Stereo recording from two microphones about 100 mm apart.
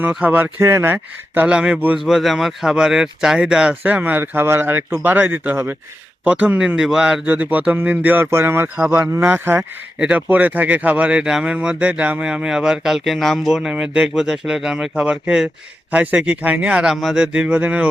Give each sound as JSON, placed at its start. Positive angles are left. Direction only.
{"t": 0.1, "sound": "speech", "side_deg": -15}
{"t": 2.1, "sound": "speech", "side_deg": 0}
{"t": 7.3, "sound": "speech", "side_deg": -15}
{"t": 10.0, "sound": "speech", "side_deg": -15}